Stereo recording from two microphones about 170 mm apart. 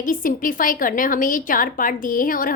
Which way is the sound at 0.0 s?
55° left (ahead or behind).